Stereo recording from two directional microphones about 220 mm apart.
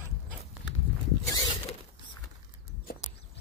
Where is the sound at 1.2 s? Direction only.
15° left (ahead or behind).